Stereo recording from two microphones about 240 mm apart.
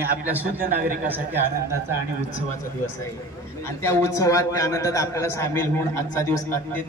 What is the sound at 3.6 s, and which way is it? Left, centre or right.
A man's voice, centre.